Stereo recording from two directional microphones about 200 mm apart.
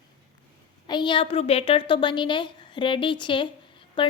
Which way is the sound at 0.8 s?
20° left (ahead or behind).